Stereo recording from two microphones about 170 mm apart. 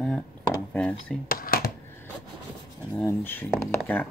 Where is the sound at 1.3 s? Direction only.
60° left (ahead or behind).